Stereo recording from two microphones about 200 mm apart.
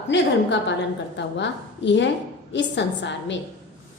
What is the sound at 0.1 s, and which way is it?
A woman's voice, 65° left (ahead or behind).